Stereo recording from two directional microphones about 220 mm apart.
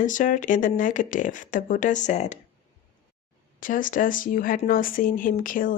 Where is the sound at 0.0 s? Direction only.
35° left (ahead or behind).